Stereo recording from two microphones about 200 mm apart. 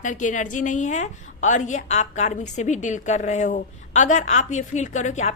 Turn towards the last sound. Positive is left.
turn(degrees=35)  # may be behind; listen again after turning